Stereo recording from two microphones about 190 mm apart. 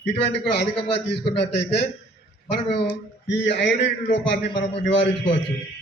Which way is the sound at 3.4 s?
65° left (ahead or behind).